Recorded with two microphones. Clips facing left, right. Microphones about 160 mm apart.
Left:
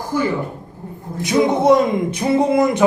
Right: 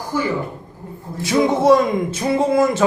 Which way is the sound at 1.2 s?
20° left (ahead or behind).